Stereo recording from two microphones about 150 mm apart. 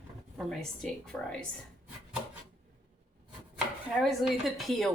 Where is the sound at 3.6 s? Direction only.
Centre (ahead or behind).